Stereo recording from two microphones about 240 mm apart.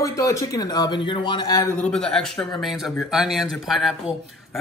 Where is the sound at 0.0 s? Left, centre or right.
Centre.